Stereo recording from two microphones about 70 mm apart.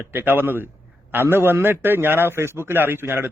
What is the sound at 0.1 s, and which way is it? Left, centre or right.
Speech, right.